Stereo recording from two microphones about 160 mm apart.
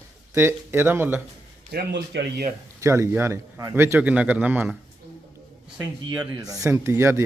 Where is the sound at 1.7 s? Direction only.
80° right.